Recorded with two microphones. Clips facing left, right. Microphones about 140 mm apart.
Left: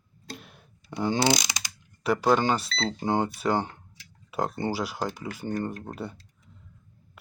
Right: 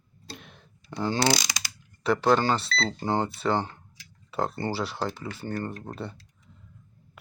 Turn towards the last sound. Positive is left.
turn(degrees=10)  # may be behind; listen again after turning